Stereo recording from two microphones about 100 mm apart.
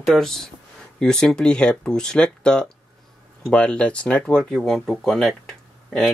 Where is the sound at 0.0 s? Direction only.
Centre (ahead or behind).